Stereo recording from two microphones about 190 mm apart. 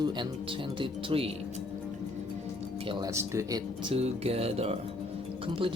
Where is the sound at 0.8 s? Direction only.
30° right (ahead or behind).